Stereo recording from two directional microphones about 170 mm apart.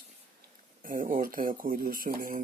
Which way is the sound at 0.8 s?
55° right (ahead or behind).